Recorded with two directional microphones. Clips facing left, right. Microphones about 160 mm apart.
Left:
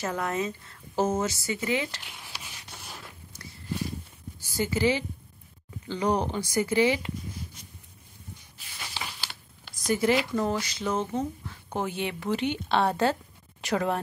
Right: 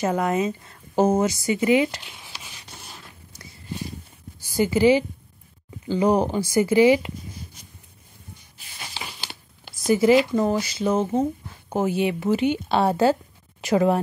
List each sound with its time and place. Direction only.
0.0 s a woman's voice: 20° right (ahead or behind)
4.4 s a woman's voice: 15° right (ahead or behind)
8.8 s crumpling: 25° right (ahead or behind)
9.8 s speech: 5° right (ahead or behind)